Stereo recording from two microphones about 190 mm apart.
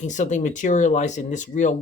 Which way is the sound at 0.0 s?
40° left (ahead or behind).